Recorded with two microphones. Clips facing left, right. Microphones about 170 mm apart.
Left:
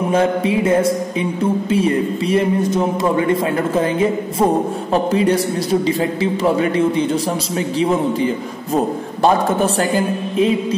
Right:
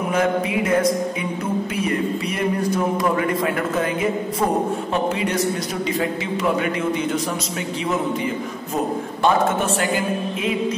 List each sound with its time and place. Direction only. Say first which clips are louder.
0.1 s a man's voice: left 4 dB; 30° left (ahead or behind)